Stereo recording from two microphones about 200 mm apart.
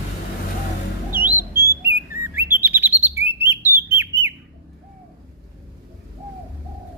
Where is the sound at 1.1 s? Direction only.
10° right (ahead or behind).